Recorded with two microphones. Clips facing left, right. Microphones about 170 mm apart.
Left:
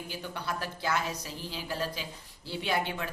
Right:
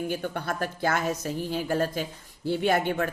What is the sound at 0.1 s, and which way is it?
Speech, 55° right (ahead or behind).